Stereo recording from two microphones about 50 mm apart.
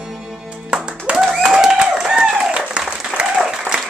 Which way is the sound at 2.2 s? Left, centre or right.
Centre.